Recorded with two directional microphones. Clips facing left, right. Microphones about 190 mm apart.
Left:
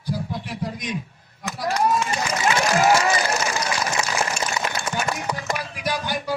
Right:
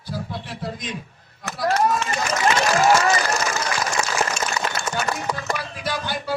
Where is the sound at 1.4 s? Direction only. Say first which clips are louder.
Right 2 dB; 15° left (ahead or behind).